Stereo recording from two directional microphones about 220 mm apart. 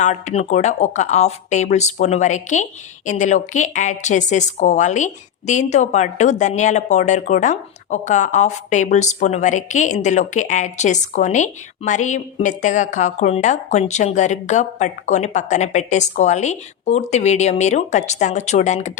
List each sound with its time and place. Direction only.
0.0 s a woman's voice: 30° left (ahead or behind)